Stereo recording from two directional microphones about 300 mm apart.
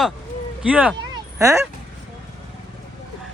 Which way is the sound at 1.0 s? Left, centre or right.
Centre.